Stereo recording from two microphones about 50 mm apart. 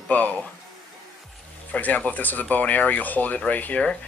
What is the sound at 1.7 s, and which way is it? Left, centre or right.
Speech, left.